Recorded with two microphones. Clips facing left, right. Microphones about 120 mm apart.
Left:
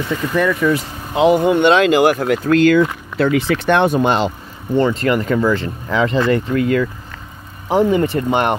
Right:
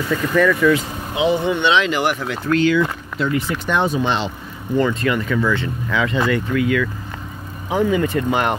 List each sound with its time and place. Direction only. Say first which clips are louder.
0.1 s speech: right 1 dB; 20° left (ahead or behind)
1.1 s speech: left 6 dB; 50° left (ahead or behind)
3.2 s speech: left 6 dB; 90° left; by 4.3 s 45° left (ahead or behind)
4.7 s speech: left 3 dB; 35° left (ahead or behind)